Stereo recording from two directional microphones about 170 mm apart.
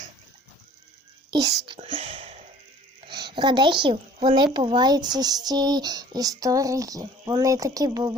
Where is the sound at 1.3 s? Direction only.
25° right (ahead or behind).